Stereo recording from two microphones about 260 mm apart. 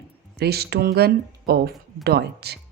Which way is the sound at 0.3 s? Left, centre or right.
Right.